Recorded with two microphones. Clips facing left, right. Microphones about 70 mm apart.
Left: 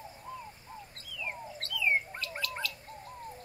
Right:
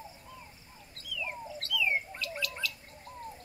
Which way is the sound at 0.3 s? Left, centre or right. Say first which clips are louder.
Left 7 dB; left.